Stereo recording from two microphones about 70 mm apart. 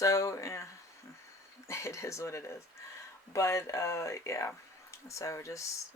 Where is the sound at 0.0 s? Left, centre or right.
Left.